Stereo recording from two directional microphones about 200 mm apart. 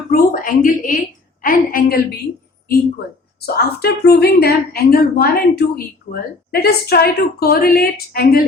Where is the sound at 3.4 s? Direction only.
55° left (ahead or behind).